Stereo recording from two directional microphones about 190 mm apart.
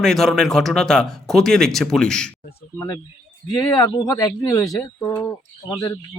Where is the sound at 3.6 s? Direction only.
20° left (ahead or behind).